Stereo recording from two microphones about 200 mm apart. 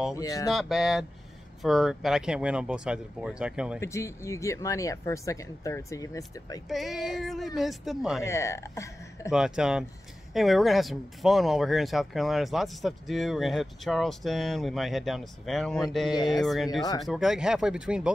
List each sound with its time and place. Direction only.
0.1 s speech: 15° left (ahead or behind)
0.5 s speech: centre (ahead or behind)
3.8 s speech: 15° left (ahead or behind)
6.7 s speech: centre (ahead or behind)
8.2 s speech: 15° left (ahead or behind)
9.3 s speech: 5° right (ahead or behind)